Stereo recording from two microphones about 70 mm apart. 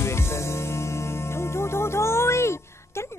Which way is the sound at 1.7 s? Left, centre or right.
Left.